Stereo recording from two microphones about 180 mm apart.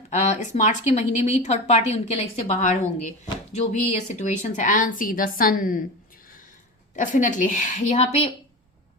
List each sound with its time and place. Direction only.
0.1 s a woman's voice: 40° left (ahead or behind)
6.9 s a woman's voice: 45° left (ahead or behind)